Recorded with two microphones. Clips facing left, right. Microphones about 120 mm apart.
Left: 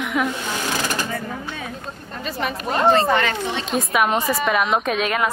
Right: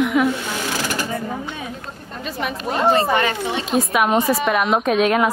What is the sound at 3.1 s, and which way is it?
Speech, 15° right (ahead or behind).